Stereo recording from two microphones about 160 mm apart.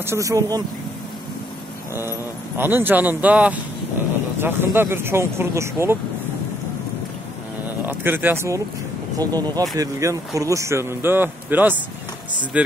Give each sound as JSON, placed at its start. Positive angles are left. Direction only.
{"t": 0.0, "sound": "speech", "side_deg": -20}
{"t": 2.0, "sound": "speech", "side_deg": -15}
{"t": 7.8, "sound": "speech", "side_deg": -10}